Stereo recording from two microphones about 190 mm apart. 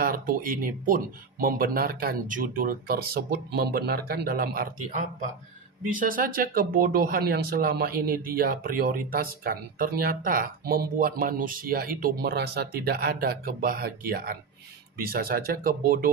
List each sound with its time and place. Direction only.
0.0 s speech: 50° right (ahead or behind)